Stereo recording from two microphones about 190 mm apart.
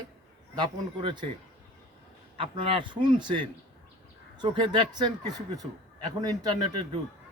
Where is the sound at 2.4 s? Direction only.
25° right (ahead or behind).